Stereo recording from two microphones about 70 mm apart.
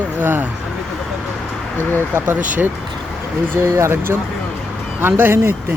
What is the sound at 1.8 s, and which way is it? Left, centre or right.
Speech, left.